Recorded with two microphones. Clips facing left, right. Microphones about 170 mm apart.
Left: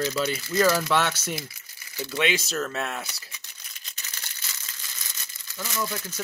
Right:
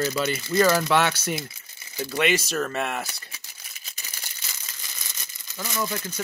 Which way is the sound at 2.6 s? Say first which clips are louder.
Right 3 dB; 10° right (ahead or behind).